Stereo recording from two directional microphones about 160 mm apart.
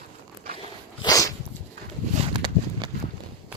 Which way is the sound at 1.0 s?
20° left (ahead or behind).